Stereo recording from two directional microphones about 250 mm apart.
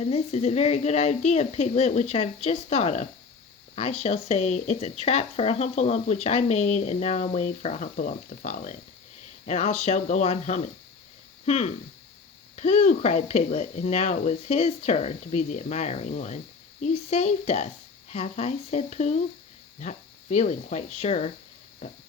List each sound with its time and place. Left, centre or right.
0.0 s speech: left